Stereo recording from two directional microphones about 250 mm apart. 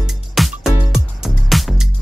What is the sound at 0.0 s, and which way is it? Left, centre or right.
Music, centre.